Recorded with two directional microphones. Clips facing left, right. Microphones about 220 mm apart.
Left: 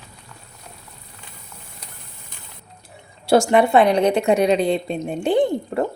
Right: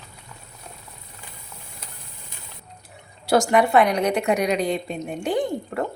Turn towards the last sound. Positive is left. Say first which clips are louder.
# left 5 dB
turn(degrees=30)  # may be behind; listen again after turning